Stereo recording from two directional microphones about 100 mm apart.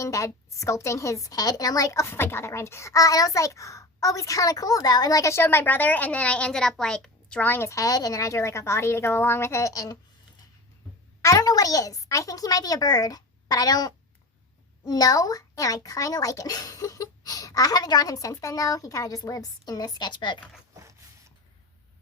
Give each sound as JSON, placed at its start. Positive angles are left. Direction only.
{"t": 0.0, "sound": "a woman's voice", "side_deg": 30}
{"t": 11.2, "sound": "a woman's voice", "side_deg": 35}
{"t": 20.7, "sound": "a sound", "side_deg": -30}